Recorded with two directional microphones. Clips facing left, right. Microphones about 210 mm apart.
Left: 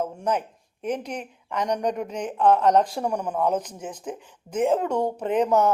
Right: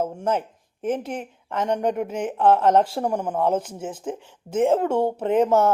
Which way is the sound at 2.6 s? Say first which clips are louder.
Right 1 dB; 25° right (ahead or behind).